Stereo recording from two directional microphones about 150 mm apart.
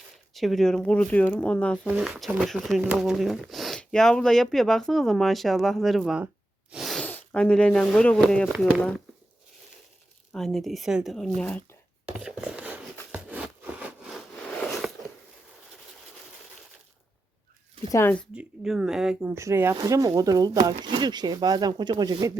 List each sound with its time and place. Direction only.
0.3 s speech: centre (ahead or behind)
1.9 s speech: 5° right (ahead or behind)
6.7 s sneeze: centre (ahead or behind)
7.0 s speech: 10° left (ahead or behind)
10.3 s speech: centre (ahead or behind)
11.3 s speech: 10° left (ahead or behind)
12.0 s a sound: 5° right (ahead or behind)
17.9 s speech: 10° left (ahead or behind)
18.3 s speech: 5° right (ahead or behind)
19.2 s speech: 20° right (ahead or behind)